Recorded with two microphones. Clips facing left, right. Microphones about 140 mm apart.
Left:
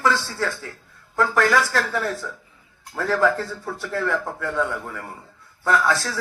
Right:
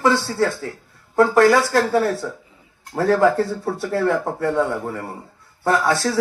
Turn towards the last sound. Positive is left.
turn(degrees=-25)  # may be behind; listen again after turning